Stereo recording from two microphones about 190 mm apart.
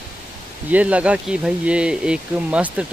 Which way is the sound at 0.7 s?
10° right (ahead or behind).